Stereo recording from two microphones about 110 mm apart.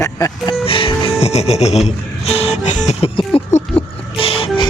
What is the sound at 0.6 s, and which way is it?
Music, 55° left (ahead or behind).